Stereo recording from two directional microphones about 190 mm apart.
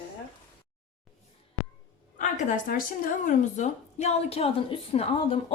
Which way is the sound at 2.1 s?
40° left (ahead or behind).